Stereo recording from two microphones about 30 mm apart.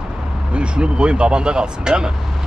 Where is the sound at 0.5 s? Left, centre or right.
Right.